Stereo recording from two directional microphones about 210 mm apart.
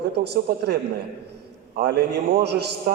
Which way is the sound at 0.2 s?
50° right (ahead or behind).